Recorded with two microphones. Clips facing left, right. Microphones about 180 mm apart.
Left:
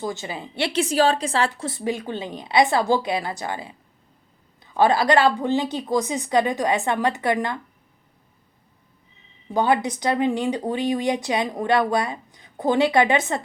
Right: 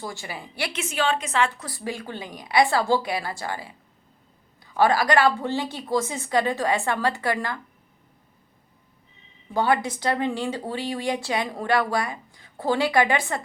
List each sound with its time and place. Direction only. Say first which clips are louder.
0.0 s speech: left 5 dB; 20° left (ahead or behind)
9.5 s speech: left 2 dB; 20° left (ahead or behind)